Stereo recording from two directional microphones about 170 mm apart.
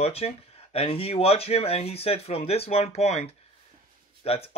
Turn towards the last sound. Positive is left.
turn(degrees=35)  # may be behind; listen again after turning